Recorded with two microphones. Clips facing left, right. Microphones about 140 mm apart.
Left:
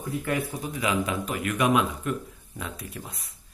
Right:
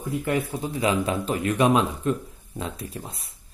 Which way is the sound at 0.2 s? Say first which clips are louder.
Right 4 dB; 25° right (ahead or behind).